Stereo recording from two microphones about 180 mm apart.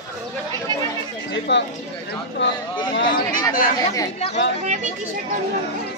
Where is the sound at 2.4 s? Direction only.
80° left.